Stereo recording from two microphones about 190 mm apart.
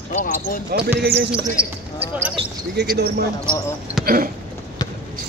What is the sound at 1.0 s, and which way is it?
Speech, 65° right (ahead or behind).